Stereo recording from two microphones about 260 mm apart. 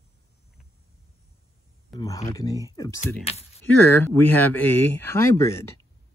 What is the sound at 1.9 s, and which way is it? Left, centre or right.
Speech, centre.